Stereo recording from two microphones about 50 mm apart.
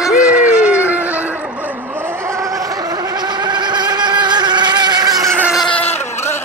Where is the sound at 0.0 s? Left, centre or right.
Centre.